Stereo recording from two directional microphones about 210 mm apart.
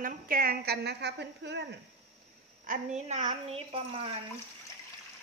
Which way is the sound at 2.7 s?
35° right (ahead or behind).